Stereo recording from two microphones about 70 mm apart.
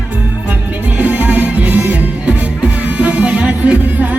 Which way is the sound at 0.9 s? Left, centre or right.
Right.